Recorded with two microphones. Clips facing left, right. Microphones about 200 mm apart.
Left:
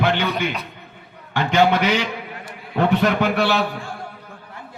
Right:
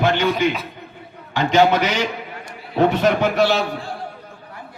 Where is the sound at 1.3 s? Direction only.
55° left (ahead or behind).